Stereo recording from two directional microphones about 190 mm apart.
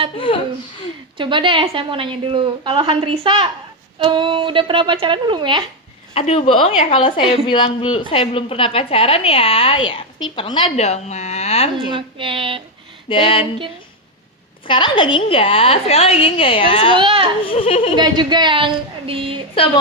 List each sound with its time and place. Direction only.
0.3 s a woman's voice: 30° left (ahead or behind)
1.2 s a woman's voice: 25° right (ahead or behind)
6.1 s a woman's voice: 30° left (ahead or behind)
11.9 s a woman's voice: 25° right (ahead or behind)
13.1 s a woman's voice: 25° left (ahead or behind)
14.7 s a woman's voice: 25° left (ahead or behind)
17.0 s a woman's voice: 25° right (ahead or behind)
17.4 s speech: 30° left (ahead or behind)
17.9 s a woman's voice: 25° right (ahead or behind)